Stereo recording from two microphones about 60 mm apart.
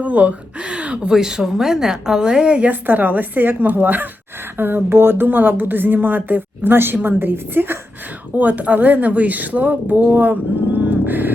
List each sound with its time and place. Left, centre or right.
0.0 s speech: right
1.1 s a woman's voice: centre; by 10.3 s right
10.8 s vehicle: right